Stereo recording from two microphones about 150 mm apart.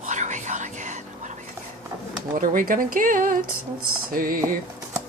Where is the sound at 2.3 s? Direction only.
60° right (ahead or behind).